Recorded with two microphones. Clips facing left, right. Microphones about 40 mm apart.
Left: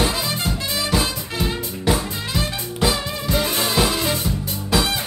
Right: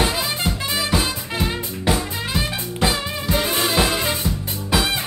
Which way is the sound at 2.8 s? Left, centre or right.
Centre.